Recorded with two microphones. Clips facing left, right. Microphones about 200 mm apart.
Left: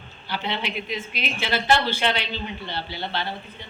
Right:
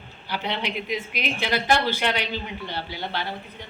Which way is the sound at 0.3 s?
15° right (ahead or behind).